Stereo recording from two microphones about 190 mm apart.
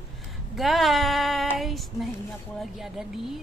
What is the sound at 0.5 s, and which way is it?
A woman's voice, centre (ahead or behind).